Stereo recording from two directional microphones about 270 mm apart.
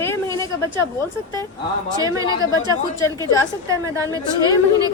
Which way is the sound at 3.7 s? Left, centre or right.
Centre.